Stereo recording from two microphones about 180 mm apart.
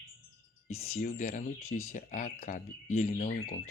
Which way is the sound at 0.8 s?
45° left (ahead or behind).